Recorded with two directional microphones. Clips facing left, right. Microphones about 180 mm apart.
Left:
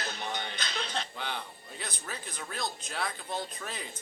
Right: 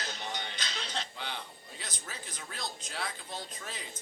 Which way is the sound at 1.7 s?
60° left (ahead or behind).